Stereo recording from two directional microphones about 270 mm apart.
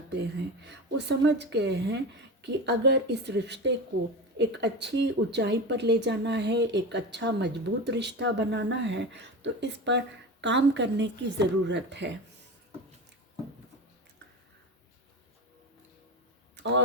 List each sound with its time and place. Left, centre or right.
0.1 s a woman's voice: right
16.6 s speech: right